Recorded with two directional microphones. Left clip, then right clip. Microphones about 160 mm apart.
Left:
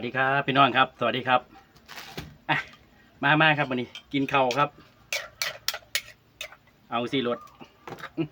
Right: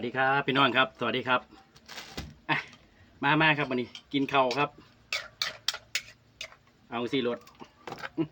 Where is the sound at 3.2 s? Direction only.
20° left (ahead or behind).